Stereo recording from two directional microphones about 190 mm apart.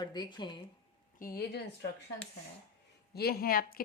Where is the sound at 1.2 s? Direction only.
50° left (ahead or behind).